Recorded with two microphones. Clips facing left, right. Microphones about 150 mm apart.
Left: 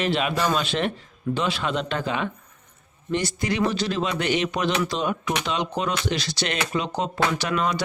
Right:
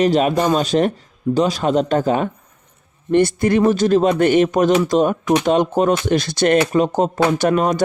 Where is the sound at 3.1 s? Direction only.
55° right (ahead or behind).